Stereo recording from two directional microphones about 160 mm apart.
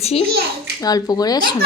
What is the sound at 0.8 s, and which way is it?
Speech, 25° left (ahead or behind).